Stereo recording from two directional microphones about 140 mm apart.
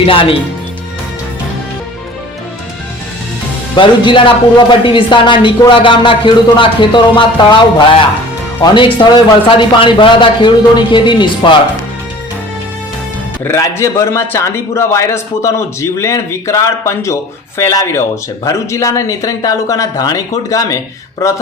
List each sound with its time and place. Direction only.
0.0 s a woman's voice: 40° left (ahead or behind)
3.8 s a woman's voice: 35° left (ahead or behind)
13.4 s a man's voice: 20° left (ahead or behind)